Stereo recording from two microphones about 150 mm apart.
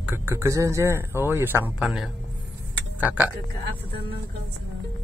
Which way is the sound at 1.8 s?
Centre (ahead or behind).